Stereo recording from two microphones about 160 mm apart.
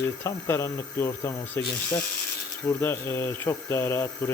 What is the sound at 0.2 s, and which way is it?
Speech, 15° left (ahead or behind).